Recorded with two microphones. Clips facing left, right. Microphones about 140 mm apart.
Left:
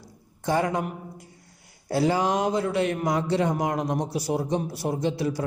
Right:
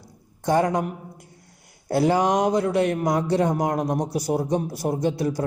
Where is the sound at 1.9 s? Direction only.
50° right (ahead or behind).